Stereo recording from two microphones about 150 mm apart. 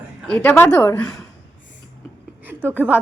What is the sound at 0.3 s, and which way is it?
Speech, 10° left (ahead or behind).